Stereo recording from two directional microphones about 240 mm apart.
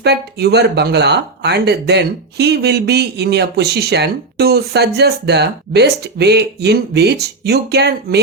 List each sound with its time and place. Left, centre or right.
0.0 s speech: right